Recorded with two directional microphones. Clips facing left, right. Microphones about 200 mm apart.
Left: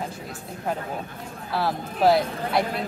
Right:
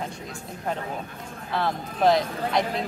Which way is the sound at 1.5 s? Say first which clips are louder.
Left 1 dB; 5° left (ahead or behind).